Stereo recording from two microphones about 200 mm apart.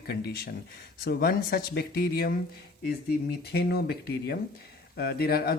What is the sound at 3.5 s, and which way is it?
Speech, 55° left (ahead or behind).